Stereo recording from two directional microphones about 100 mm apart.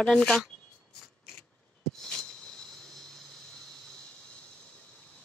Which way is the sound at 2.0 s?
5° left (ahead or behind).